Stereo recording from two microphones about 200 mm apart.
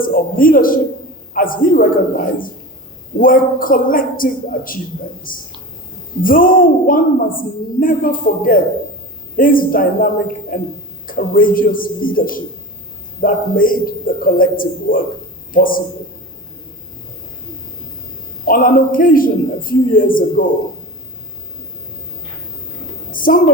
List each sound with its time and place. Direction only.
0.0 s a woman's voice: 45° left (ahead or behind)
18.4 s a woman's voice: 45° left (ahead or behind)
23.1 s a sound: 45° left (ahead or behind)